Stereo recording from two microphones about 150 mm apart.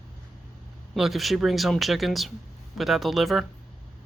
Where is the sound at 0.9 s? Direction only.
Centre (ahead or behind).